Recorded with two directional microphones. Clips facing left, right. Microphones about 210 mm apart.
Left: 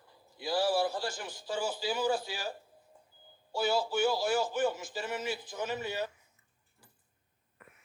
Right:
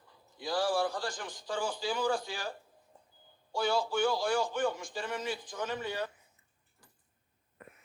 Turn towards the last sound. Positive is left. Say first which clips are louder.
# left 1 dB
turn(degrees=10)  # may be behind; listen again after turning